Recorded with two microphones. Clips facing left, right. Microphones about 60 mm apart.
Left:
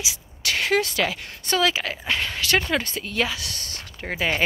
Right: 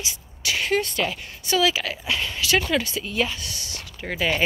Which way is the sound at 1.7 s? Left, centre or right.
Left.